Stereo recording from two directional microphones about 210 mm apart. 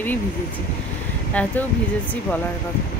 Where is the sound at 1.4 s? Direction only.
5° left (ahead or behind).